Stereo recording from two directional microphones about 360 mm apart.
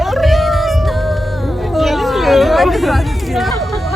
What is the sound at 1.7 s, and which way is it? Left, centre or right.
Chatter, centre.